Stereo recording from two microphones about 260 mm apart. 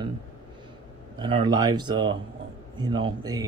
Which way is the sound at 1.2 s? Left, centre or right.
Centre.